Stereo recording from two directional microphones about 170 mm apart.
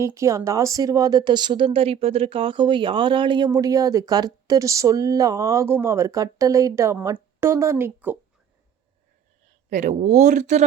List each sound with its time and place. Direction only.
0.0 s a woman's voice: 15° right (ahead or behind)
9.7 s speech: 45° right (ahead or behind)